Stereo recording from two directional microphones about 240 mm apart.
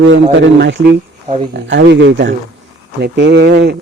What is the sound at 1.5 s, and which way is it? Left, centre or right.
Speech, right.